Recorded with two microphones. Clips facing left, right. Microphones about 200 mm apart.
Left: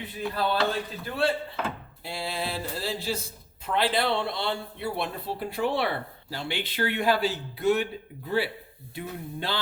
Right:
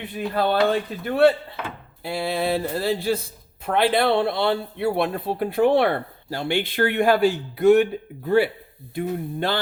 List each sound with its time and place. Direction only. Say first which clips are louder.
0.3 s speech: right 7 dB; 60° right (ahead or behind)
9.0 s speech: right 9 dB; 55° right (ahead or behind)